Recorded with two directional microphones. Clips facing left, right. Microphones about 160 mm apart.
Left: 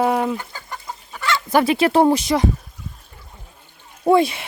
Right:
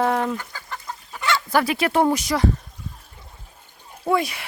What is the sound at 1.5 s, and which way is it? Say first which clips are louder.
Speech: left 6 dB; 20° left (ahead or behind).